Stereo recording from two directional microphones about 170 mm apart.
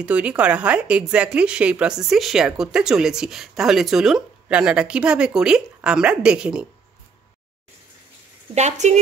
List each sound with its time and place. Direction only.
0.0 s a woman's voice: 5° right (ahead or behind)
8.5 s a woman's voice: 40° right (ahead or behind)